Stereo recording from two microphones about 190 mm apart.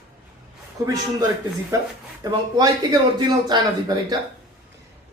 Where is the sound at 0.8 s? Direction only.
15° right (ahead or behind).